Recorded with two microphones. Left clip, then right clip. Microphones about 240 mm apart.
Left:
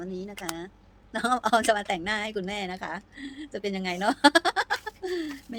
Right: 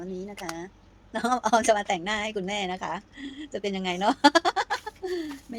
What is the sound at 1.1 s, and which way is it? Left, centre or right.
Speech, centre.